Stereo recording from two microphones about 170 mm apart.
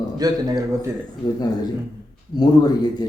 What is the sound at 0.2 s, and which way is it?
Speech, 20° right (ahead or behind).